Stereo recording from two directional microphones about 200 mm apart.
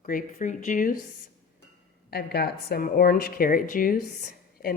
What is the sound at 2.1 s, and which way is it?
A woman's voice, 50° left (ahead or behind).